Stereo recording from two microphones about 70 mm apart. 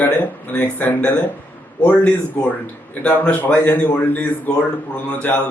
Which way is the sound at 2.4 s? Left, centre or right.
Left.